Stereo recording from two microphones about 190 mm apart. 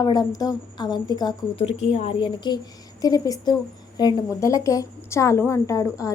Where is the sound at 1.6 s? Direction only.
35° left (ahead or behind).